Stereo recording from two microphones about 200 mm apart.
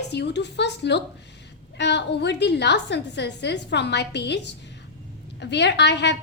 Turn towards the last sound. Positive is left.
turn(degrees=60)  # may be behind; listen again after turning